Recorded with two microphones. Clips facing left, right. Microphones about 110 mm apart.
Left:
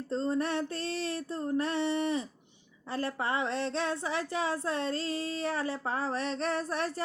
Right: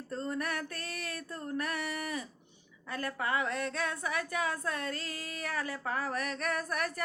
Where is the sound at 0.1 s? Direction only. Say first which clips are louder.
Left 5 dB; 25° left (ahead or behind).